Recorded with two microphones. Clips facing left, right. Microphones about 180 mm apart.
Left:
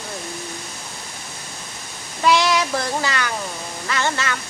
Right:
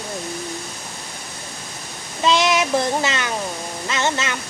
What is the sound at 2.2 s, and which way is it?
Speech, 20° right (ahead or behind).